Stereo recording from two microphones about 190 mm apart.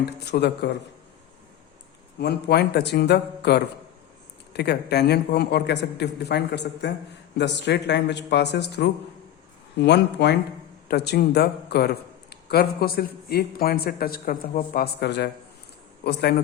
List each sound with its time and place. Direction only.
0.0 s a man's voice: 60° left (ahead or behind)
2.1 s a man's voice: 60° left (ahead or behind)